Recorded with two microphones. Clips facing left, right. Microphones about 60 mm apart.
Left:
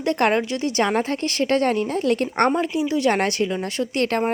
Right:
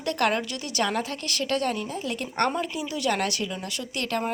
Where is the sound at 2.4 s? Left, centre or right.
Left.